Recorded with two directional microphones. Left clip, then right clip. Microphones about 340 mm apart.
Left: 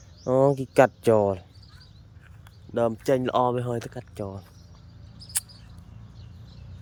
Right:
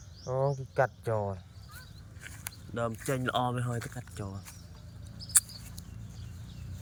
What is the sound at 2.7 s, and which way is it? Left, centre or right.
Speech, centre.